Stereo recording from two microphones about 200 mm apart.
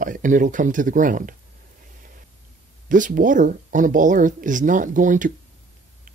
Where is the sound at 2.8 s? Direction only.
40° right (ahead or behind).